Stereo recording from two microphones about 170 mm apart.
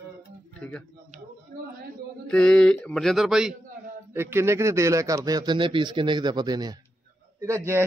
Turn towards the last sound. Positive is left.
turn(degrees=-15)  # may be behind; listen again after turning